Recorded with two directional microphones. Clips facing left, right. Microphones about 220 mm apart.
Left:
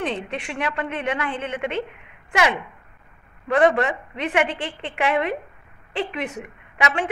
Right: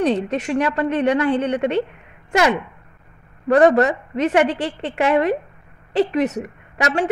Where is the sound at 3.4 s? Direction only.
40° right (ahead or behind).